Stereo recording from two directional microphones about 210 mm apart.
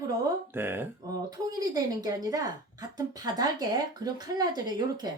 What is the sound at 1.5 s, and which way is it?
A woman's voice, 15° right (ahead or behind).